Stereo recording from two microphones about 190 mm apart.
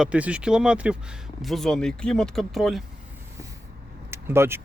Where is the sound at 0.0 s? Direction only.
5° right (ahead or behind).